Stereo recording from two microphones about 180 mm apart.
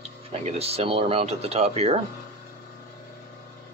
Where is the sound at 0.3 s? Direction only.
35° right (ahead or behind).